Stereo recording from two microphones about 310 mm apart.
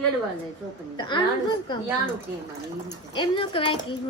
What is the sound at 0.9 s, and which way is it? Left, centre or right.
Speech, centre.